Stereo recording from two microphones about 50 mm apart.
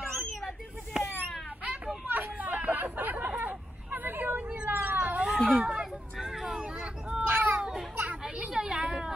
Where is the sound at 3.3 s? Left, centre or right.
Right.